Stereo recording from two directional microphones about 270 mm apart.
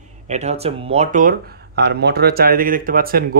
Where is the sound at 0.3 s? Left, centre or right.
Right.